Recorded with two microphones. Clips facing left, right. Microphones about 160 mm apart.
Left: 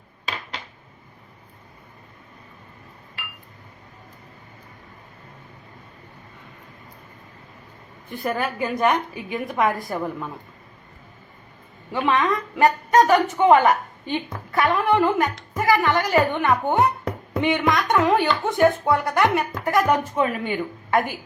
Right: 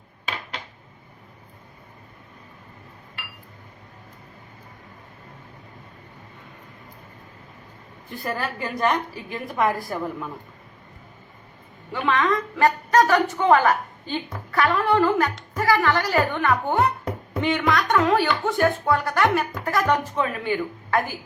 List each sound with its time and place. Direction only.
8.2 s a woman's voice: 20° left (ahead or behind)
8.9 s a woman's voice: centre (ahead or behind)
9.6 s a woman's voice: 15° left (ahead or behind)
11.9 s a woman's voice: 20° left (ahead or behind)